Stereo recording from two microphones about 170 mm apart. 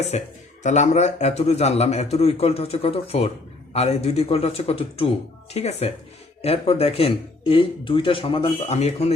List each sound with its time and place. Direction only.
0.1 s speech: 40° left (ahead or behind)